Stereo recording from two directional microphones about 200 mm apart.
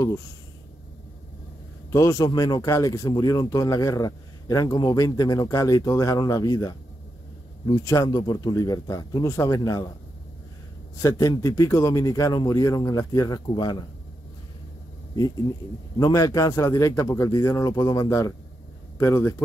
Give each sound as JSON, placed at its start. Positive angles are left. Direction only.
{"t": 1.9, "sound": "a man's voice", "side_deg": 15}
{"t": 11.0, "sound": "speech", "side_deg": 15}
{"t": 16.0, "sound": "speech", "side_deg": 15}